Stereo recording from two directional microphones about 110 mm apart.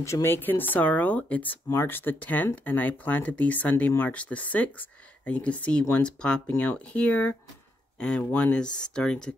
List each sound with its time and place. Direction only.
0.0 s speech: 25° left (ahead or behind); by 9.3 s 5° left (ahead or behind)